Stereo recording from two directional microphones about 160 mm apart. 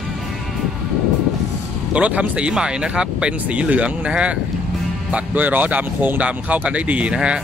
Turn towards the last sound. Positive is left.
turn(degrees=-5)  # may be behind; listen again after turning